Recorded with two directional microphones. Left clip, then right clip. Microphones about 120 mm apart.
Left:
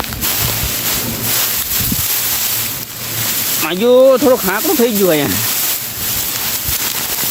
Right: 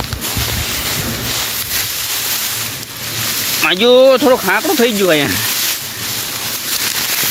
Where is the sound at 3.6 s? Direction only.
20° left (ahead or behind).